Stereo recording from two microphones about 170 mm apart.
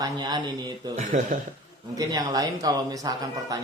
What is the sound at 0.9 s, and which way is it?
Speech, 45° right (ahead or behind).